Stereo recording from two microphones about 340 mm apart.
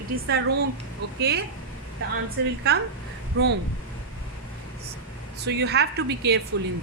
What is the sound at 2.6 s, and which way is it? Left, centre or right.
Speech, right.